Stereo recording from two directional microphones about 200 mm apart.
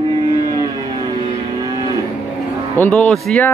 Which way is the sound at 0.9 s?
20° right (ahead or behind).